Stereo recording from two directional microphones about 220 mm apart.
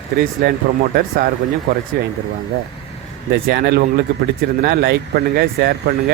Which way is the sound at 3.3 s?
45° right (ahead or behind).